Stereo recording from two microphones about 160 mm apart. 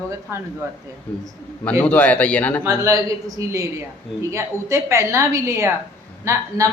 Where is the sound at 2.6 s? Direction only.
20° right (ahead or behind).